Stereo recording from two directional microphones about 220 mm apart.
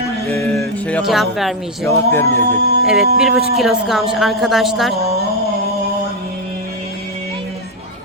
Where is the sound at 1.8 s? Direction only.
10° left (ahead or behind).